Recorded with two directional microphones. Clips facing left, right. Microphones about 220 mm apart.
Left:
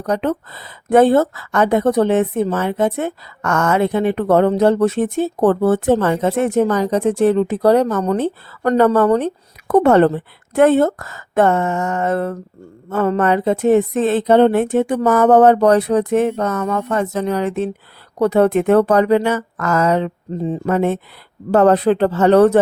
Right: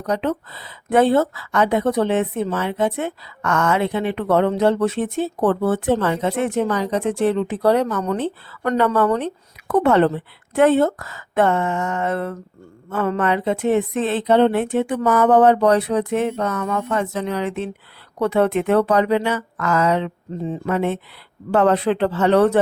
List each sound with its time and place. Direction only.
0.0 s speech: 50° left (ahead or behind)